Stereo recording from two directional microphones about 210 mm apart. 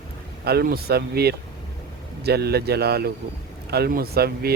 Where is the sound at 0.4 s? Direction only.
45° right (ahead or behind).